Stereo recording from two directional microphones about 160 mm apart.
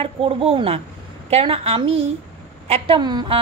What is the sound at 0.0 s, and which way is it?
A woman's voice, 35° right (ahead or behind).